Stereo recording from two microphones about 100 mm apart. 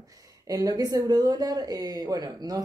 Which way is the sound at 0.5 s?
35° right (ahead or behind).